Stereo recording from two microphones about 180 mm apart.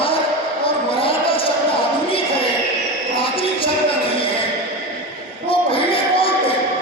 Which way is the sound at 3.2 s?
30° left (ahead or behind).